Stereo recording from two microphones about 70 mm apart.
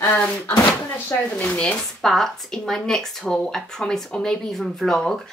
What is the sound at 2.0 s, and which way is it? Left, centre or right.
A woman's voice, centre.